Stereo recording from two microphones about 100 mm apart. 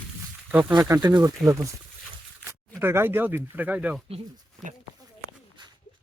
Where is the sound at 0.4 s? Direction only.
15° right (ahead or behind).